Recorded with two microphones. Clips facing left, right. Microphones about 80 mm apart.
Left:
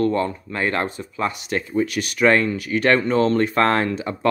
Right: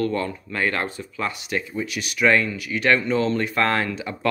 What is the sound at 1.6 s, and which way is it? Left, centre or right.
Speech, left.